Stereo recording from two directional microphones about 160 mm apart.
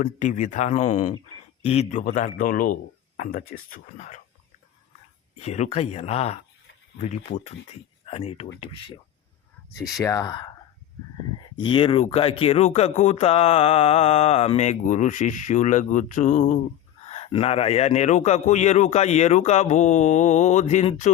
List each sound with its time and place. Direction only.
0.0 s speech: 50° left (ahead or behind)
5.4 s speech: 40° left (ahead or behind)
8.0 s speech: 40° left (ahead or behind)
10.0 s speech: 20° left (ahead or behind)
11.6 s speech: 30° left (ahead or behind); by 16.6 s 50° left (ahead or behind)
17.1 s speech: 35° left (ahead or behind)